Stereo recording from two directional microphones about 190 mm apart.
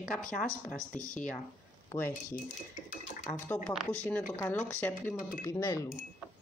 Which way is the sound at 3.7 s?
5° left (ahead or behind).